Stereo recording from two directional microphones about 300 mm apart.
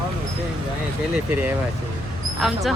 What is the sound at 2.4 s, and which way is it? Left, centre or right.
Speech, centre.